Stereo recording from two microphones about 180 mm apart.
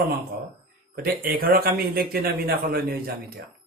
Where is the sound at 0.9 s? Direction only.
55° right (ahead or behind).